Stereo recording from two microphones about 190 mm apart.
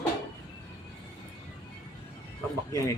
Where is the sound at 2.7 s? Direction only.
15° left (ahead or behind).